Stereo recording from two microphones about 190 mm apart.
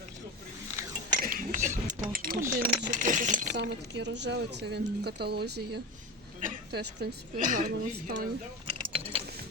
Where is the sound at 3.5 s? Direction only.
65° right (ahead or behind).